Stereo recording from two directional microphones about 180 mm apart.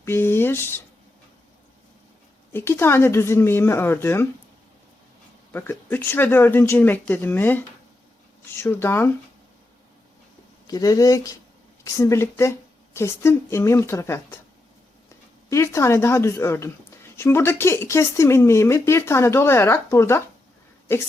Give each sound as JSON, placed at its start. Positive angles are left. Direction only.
{"t": 0.0, "sound": "speech", "side_deg": 10}
{"t": 2.5, "sound": "a woman's voice", "side_deg": 10}
{"t": 5.5, "sound": "a woman's voice", "side_deg": 10}
{"t": 8.6, "sound": "a woman's voice", "side_deg": 10}
{"t": 10.7, "sound": "a woman's voice", "side_deg": 20}
{"t": 15.4, "sound": "a woman's voice", "side_deg": 15}